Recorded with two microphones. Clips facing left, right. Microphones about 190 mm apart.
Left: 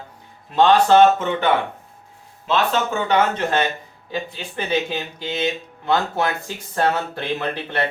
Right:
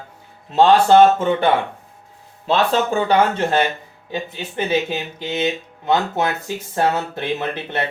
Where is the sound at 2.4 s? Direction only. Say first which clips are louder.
Right 3 dB; 35° right (ahead or behind).